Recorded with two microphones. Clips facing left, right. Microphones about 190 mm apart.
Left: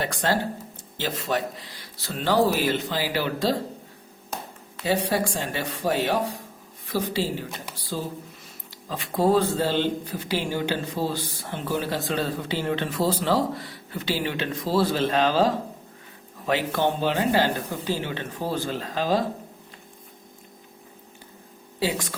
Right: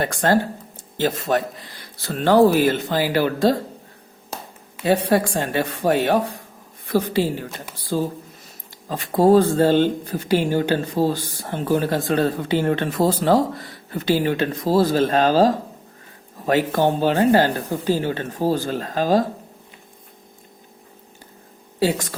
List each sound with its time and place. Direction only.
0.0 s speech: 50° right (ahead or behind)
4.9 s speech: 55° right (ahead or behind)
8.9 s speech: 45° right (ahead or behind)
21.8 s speech: 45° right (ahead or behind)